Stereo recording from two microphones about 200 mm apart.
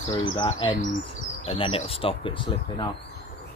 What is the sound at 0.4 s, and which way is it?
Speech, 25° left (ahead or behind).